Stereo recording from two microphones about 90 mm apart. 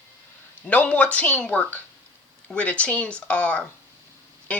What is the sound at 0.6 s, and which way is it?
Speech, 15° left (ahead or behind).